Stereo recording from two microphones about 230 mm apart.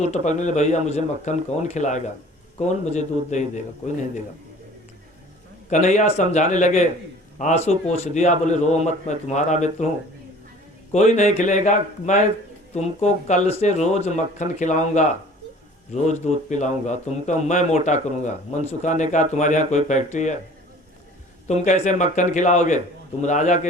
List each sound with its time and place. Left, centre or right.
0.0 s a man's voice: left
5.7 s a man's voice: left
10.9 s a man's voice: left
21.4 s a man's voice: left